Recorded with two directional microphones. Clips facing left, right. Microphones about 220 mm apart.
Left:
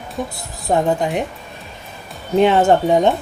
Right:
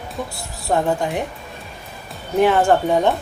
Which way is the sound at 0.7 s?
20° left (ahead or behind).